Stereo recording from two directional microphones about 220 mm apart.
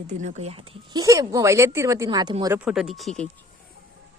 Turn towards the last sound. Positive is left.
turn(degrees=0)  # may be behind; listen again after turning